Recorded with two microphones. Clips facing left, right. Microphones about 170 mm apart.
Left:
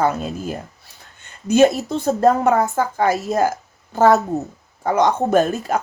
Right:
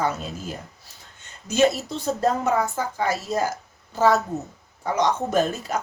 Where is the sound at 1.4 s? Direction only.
55° left (ahead or behind).